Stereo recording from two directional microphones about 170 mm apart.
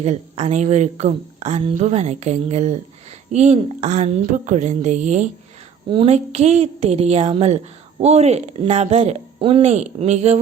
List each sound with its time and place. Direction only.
0.0 s a woman's voice: 40° right (ahead or behind)